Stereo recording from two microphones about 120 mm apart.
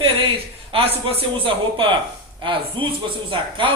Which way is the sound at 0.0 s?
50° right (ahead or behind).